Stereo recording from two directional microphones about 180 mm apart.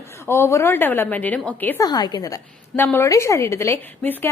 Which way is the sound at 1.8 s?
20° left (ahead or behind).